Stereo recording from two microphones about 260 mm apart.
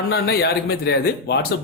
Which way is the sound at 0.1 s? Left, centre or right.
Left.